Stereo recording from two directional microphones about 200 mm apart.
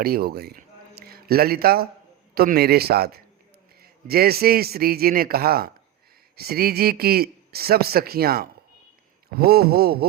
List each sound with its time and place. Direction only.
0.0 s a man's voice: 50° right (ahead or behind)